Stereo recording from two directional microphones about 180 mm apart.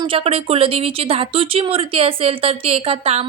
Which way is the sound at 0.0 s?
30° right (ahead or behind).